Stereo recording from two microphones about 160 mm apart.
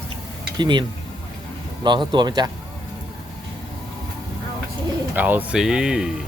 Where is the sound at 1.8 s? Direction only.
30° right (ahead or behind).